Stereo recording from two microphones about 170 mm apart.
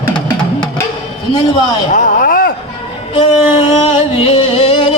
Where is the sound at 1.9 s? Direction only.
50° left (ahead or behind).